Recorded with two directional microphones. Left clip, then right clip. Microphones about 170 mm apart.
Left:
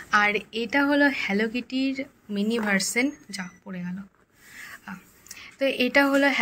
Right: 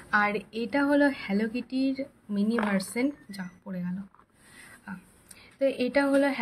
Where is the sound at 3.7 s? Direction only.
10° right (ahead or behind).